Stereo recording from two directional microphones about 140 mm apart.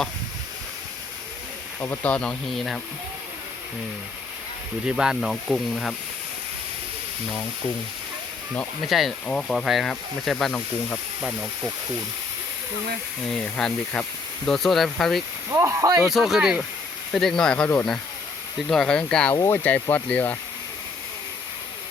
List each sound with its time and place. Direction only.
1.8 s speech: 15° left (ahead or behind)
4.9 s speech: 5° right (ahead or behind)
8.9 s speech: centre (ahead or behind)
11.2 s speech: 10° right (ahead or behind)
13.2 s speech: 5° left (ahead or behind)
15.5 s speech: 20° right (ahead or behind)
16.0 s speech: centre (ahead or behind)